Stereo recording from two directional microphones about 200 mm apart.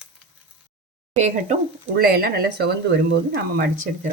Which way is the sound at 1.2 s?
35° right (ahead or behind).